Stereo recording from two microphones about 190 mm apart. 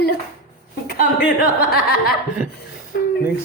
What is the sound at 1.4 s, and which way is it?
Speech, 55° left (ahead or behind).